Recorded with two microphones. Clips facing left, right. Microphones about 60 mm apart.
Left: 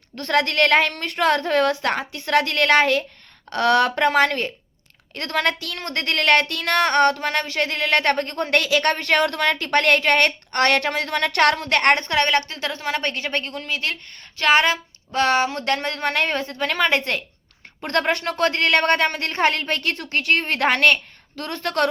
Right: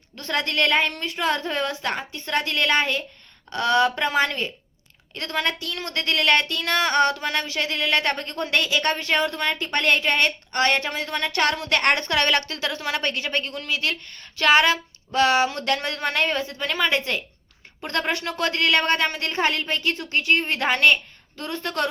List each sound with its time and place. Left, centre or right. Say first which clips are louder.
0.2 s a woman's voice: left 5 dB; left